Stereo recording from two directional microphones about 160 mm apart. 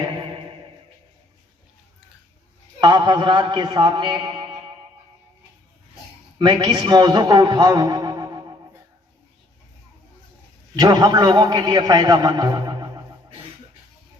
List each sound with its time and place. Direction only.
2.8 s a man's voice: 30° right (ahead or behind)
6.4 s a man's voice: 30° right (ahead or behind)
10.8 s a man's voice: 25° right (ahead or behind)